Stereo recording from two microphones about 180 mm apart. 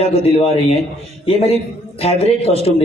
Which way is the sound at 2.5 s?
35° left (ahead or behind).